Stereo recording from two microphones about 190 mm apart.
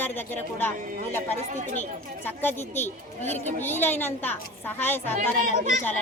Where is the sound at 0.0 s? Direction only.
10° left (ahead or behind).